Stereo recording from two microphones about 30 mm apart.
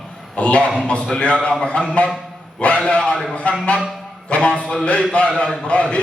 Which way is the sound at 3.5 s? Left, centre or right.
Left.